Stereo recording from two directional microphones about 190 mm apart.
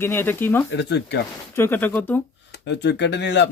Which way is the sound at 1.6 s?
10° left (ahead or behind).